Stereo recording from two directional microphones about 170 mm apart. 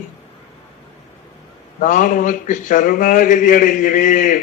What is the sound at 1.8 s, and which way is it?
A man's voice, 50° left (ahead or behind).